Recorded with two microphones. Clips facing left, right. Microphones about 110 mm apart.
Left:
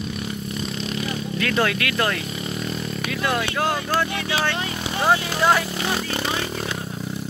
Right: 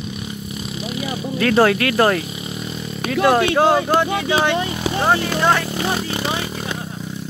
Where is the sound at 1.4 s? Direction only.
35° right (ahead or behind).